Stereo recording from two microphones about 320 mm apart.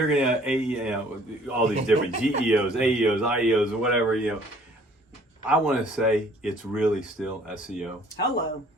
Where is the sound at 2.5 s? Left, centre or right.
Centre.